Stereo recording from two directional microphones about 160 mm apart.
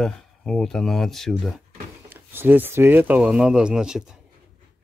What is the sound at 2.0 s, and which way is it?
Speech, 15° right (ahead or behind).